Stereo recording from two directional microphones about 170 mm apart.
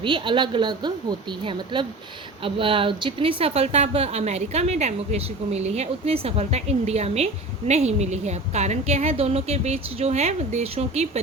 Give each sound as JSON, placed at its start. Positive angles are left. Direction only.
{"t": 0.0, "sound": "a woman's voice", "side_deg": -30}